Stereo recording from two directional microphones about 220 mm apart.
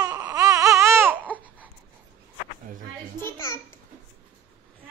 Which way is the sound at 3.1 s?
10° left (ahead or behind).